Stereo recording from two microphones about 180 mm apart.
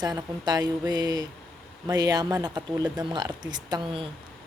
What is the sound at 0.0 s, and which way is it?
Speech, 20° right (ahead or behind).